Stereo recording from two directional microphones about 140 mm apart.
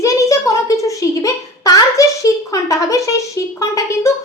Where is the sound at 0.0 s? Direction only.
20° left (ahead or behind).